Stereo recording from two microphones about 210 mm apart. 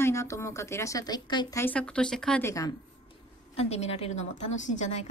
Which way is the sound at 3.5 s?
30° left (ahead or behind).